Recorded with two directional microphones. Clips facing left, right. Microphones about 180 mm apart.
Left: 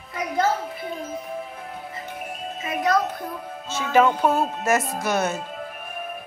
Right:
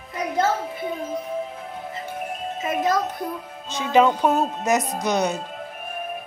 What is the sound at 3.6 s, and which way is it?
A woman's voice, 15° right (ahead or behind).